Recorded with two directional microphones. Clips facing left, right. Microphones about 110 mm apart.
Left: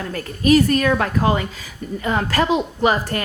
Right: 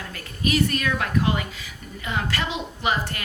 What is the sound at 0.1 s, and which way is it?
A woman's voice, 40° left (ahead or behind).